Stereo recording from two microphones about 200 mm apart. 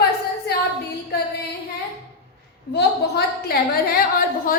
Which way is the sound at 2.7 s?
55° left (ahead or behind).